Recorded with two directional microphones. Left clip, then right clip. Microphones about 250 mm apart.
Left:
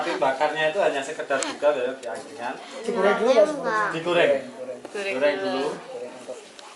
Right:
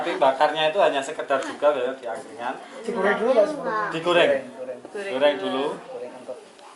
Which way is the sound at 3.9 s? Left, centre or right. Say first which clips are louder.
Right 4 dB; right.